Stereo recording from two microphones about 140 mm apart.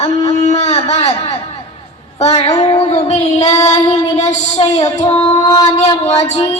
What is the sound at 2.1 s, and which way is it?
Speech, 50° left (ahead or behind).